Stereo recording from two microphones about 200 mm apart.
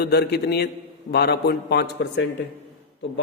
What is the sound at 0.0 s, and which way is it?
Speech, 55° left (ahead or behind).